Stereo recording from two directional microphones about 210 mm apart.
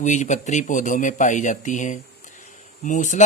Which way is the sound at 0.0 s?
35° left (ahead or behind).